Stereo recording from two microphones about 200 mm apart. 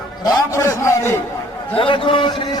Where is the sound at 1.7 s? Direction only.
25° left (ahead or behind).